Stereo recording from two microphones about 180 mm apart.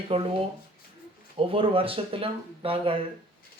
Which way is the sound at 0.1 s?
30° right (ahead or behind).